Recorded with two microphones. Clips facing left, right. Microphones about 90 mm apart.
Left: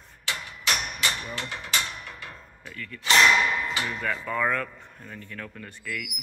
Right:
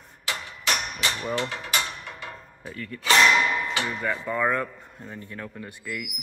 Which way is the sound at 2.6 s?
30° right (ahead or behind).